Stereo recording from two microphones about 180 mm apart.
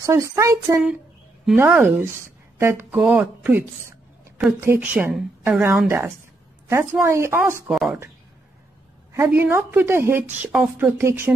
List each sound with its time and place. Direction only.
0.0 s a woman's voice: 15° right (ahead or behind)
7.7 s speech: centre (ahead or behind)
9.1 s a woman's voice: 15° right (ahead or behind)